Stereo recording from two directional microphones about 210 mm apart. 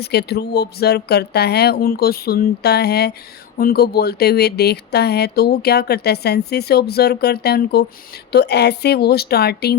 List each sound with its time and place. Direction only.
0.0 s speech: 50° left (ahead or behind)